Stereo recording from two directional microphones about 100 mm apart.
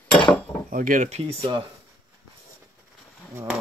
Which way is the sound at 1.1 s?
85° right.